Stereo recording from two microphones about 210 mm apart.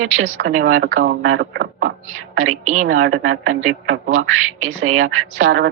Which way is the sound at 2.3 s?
35° right (ahead or behind).